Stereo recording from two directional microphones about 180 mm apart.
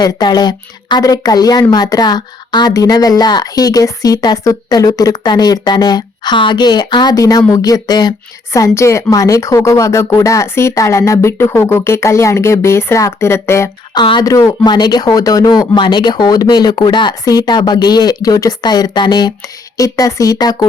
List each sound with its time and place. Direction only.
0.0 s a woman's voice: 25° left (ahead or behind)
14.0 s speech: 25° left (ahead or behind)